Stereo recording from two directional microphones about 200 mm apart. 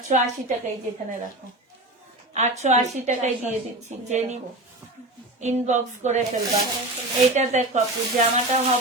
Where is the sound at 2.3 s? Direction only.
35° right (ahead or behind).